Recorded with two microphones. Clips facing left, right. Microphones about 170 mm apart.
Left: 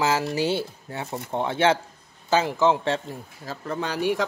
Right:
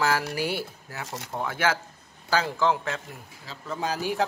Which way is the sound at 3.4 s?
60° left (ahead or behind).